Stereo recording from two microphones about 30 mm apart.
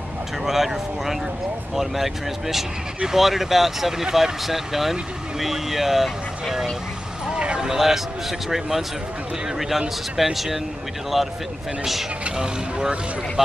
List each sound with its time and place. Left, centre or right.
0.5 s a man's voice: centre
7.3 s a sound: right
7.6 s a man's voice: centre
10.1 s a man's voice: centre
12.4 s speech: centre